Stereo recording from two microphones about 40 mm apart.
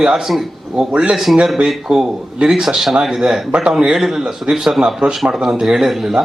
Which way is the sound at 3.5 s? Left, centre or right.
Right.